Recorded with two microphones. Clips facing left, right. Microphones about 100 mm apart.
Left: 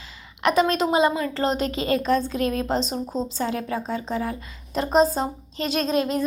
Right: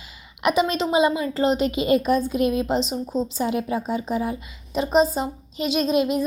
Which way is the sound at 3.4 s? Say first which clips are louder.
Right 2 dB; 15° right (ahead or behind).